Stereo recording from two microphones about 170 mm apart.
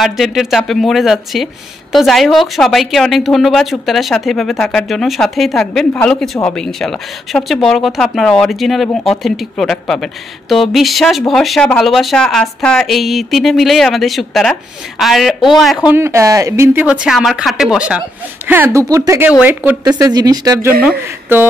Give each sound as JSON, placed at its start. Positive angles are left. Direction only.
{"t": 0.0, "sound": "speech", "side_deg": 0}
{"t": 15.9, "sound": "speech", "side_deg": -15}
{"t": 19.8, "sound": "speech", "side_deg": -25}